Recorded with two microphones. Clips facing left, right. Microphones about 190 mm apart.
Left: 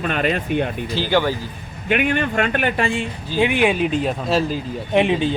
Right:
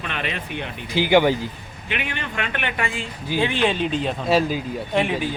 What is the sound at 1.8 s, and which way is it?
A man's voice, 50° left (ahead or behind).